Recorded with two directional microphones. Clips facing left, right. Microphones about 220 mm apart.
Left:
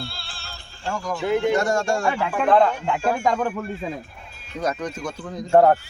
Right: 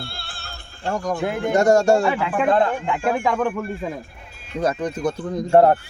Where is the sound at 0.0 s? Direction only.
55° right (ahead or behind).